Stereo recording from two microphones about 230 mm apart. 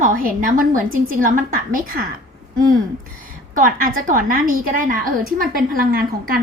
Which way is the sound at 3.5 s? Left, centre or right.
Right.